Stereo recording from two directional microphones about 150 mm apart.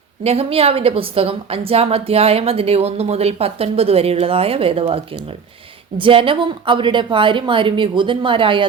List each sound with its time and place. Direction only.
0.2 s a woman's voice: 40° right (ahead or behind)